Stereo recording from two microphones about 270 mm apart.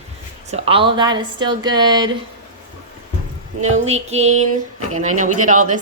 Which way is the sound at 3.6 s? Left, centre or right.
Right.